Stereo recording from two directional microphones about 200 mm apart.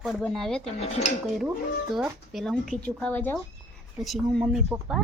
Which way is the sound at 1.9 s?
Centre (ahead or behind).